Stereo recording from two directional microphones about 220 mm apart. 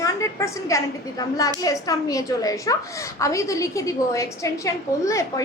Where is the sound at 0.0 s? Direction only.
15° left (ahead or behind).